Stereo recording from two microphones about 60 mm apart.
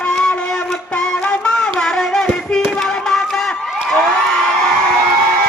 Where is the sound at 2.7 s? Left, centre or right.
Centre.